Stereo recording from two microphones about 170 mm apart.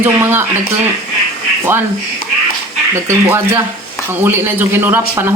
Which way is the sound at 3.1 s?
15° right (ahead or behind).